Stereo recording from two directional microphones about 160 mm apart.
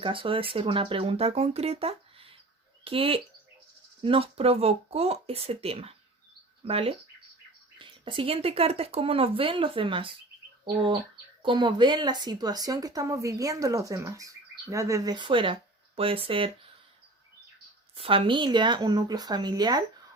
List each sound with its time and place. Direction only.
0.0 s speech: 35° right (ahead or behind)
11.4 s speech: 30° right (ahead or behind)
17.9 s speech: 35° right (ahead or behind)